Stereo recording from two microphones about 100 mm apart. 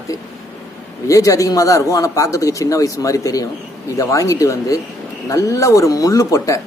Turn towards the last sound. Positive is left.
turn(degrees=30)  # may be behind; listen again after turning